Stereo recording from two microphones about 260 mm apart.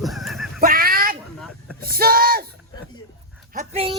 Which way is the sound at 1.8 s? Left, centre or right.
Right.